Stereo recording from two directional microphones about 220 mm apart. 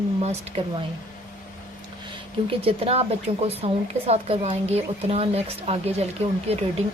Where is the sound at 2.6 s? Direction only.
25° right (ahead or behind).